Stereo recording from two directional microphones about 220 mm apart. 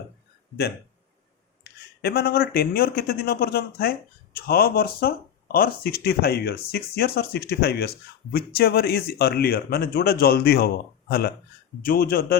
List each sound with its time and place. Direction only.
1.6 s speech: 45° left (ahead or behind)
11.8 s speech: 40° left (ahead or behind)